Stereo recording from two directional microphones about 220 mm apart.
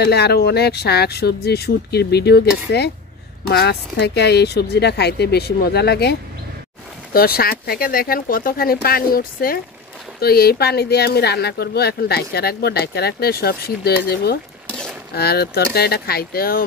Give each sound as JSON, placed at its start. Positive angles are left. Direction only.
{"t": 0.0, "sound": "speech", "side_deg": 50}
{"t": 7.2, "sound": "speech", "side_deg": 45}